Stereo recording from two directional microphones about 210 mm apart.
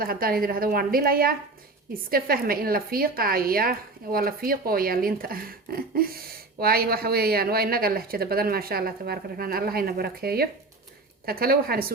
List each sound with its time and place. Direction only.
0.0 s a woman's voice: 45° right (ahead or behind)